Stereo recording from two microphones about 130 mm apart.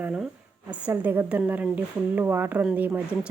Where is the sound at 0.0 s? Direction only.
5° right (ahead or behind).